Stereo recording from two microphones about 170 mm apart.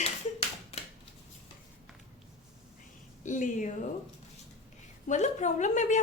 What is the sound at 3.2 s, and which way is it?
Speech, 50° left (ahead or behind).